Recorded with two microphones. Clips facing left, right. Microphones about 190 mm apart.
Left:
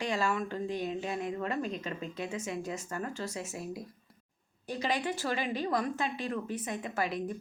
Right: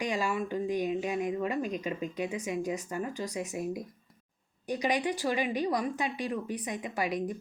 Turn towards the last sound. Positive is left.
turn(degrees=-15)  # may be behind; listen again after turning